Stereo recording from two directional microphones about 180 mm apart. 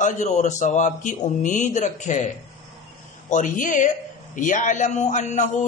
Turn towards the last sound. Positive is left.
turn(degrees=45)  # may be behind; listen again after turning